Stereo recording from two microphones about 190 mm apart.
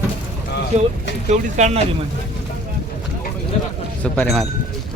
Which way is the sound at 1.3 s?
35° right (ahead or behind).